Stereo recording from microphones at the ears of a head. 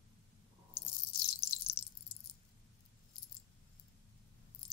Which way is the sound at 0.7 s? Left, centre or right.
Left.